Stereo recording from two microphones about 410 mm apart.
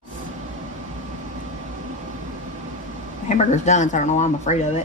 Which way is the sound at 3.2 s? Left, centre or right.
Centre.